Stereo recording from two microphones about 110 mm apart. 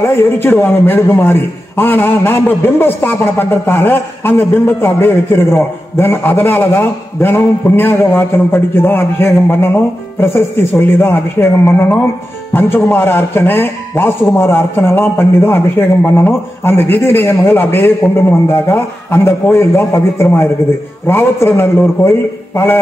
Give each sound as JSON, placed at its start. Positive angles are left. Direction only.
{"t": 0.0, "sound": "a man's voice", "side_deg": 20}